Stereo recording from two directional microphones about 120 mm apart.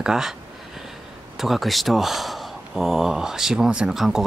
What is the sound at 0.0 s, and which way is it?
Speech, 5° right (ahead or behind).